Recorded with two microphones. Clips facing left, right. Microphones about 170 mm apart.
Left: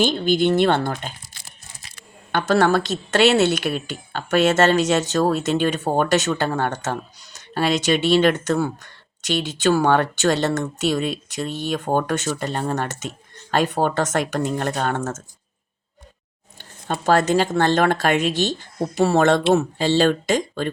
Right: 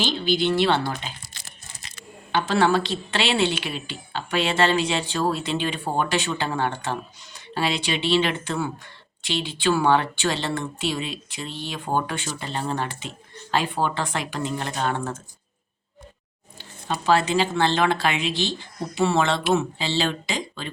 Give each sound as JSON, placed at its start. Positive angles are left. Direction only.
{"t": 0.0, "sound": "speech", "side_deg": 50}
{"t": 2.5, "sound": "speech", "side_deg": 45}
{"t": 16.6, "sound": "speech", "side_deg": 45}
{"t": 19.4, "sound": "speech", "side_deg": 25}
{"t": 19.8, "sound": "speech", "side_deg": 45}